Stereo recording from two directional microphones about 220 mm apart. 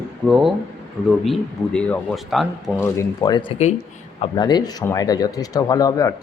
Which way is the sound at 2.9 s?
20° left (ahead or behind).